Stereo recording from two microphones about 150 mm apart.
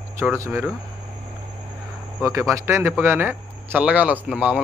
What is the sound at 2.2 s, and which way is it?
Speech, 20° right (ahead or behind).